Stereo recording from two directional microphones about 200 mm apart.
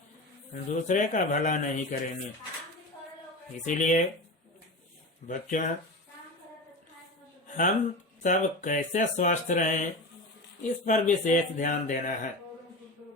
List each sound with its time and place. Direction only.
0.5 s speech: 40° left (ahead or behind)
3.8 s speech: 35° left (ahead or behind)
5.3 s speech: 40° left (ahead or behind)
7.4 s a sound: 40° left (ahead or behind)
8.2 s speech: 40° left (ahead or behind)